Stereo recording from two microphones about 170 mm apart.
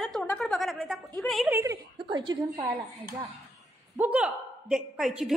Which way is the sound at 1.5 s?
15° right (ahead or behind).